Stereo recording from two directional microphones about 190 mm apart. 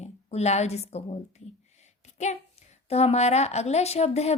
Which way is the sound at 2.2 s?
35° left (ahead or behind).